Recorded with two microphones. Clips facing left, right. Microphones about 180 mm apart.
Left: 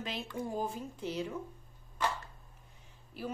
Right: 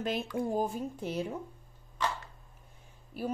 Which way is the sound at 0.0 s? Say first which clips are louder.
Right 6 dB; 45° right (ahead or behind).